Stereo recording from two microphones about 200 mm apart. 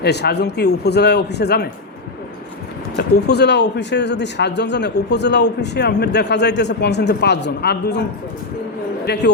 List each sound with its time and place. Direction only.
0.0 s speech: 55° left (ahead or behind)
2.9 s speech: 55° left (ahead or behind)
9.1 s speech: 55° left (ahead or behind)